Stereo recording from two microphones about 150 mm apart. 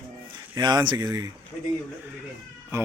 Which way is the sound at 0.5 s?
30° right (ahead or behind).